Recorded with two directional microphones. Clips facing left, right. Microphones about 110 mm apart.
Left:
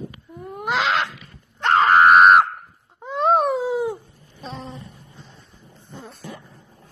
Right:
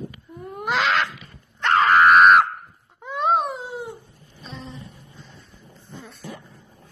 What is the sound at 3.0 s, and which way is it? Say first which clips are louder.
Wail: left 3 dB; 35° left (ahead or behind).